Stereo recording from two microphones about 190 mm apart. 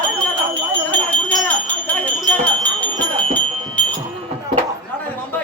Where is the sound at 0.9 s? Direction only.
5° left (ahead or behind).